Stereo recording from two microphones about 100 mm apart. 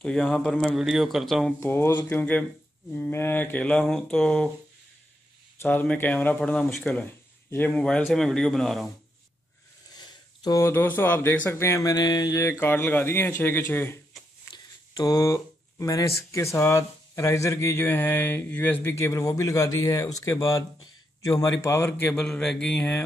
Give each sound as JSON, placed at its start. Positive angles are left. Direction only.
{"t": 0.0, "sound": "speech", "side_deg": 10}
{"t": 0.7, "sound": "speech", "side_deg": -5}
{"t": 1.6, "sound": "a man's voice", "side_deg": 25}
{"t": 5.6, "sound": "a man's voice", "side_deg": 20}
{"t": 8.0, "sound": "speech", "side_deg": 5}
{"t": 9.9, "sound": "a sound", "side_deg": 45}
{"t": 10.6, "sound": "a man's voice", "side_deg": 20}
{"t": 11.8, "sound": "a man's voice", "side_deg": 40}
{"t": 14.5, "sound": "speech", "side_deg": 40}
{"t": 18.9, "sound": "a man's voice", "side_deg": 30}